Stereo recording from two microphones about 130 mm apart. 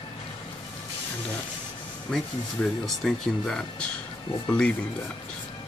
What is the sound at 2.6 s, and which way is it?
Speech, 5° left (ahead or behind).